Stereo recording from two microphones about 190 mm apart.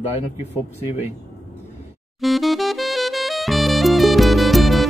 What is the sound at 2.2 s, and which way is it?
Saxophone, centre (ahead or behind).